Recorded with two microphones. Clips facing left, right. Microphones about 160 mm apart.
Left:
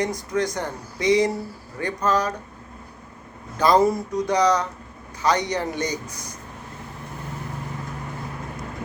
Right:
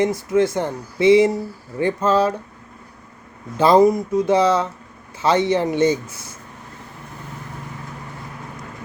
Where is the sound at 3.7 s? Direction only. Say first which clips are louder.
Right 5 dB; 20° right (ahead or behind).